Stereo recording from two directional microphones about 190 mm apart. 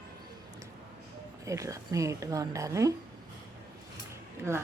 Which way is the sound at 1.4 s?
15° right (ahead or behind).